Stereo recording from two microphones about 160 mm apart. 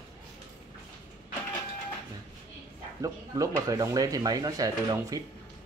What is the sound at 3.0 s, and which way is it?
Speech, 20° right (ahead or behind).